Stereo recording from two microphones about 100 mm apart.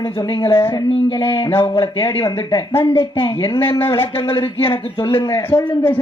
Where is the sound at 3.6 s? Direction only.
25° left (ahead or behind).